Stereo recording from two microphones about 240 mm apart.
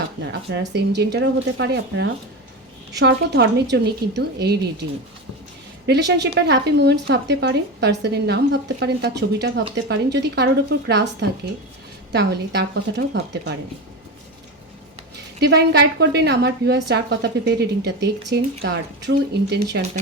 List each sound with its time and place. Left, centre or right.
0.3 s speech: right
15.1 s a woman's voice: right